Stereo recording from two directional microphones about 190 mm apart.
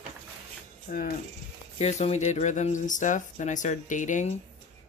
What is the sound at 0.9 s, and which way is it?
Speech, 40° left (ahead or behind).